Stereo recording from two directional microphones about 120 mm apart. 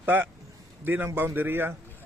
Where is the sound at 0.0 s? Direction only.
15° right (ahead or behind).